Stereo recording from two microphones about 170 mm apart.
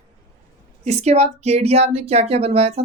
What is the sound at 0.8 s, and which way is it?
Speech, 40° right (ahead or behind).